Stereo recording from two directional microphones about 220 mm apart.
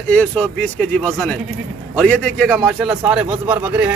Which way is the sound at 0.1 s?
5° left (ahead or behind).